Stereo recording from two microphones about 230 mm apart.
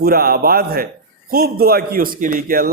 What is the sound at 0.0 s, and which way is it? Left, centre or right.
A man's voice, right.